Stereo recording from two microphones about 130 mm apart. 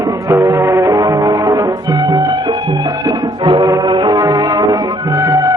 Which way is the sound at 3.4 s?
35° right (ahead or behind).